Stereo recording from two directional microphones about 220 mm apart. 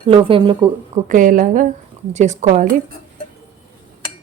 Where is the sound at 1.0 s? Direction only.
35° right (ahead or behind).